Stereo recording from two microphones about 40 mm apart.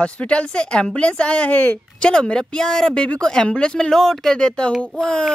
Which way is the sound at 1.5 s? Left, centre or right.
Left.